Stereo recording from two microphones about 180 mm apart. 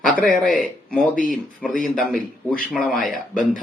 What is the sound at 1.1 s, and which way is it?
Speech, 50° left (ahead or behind).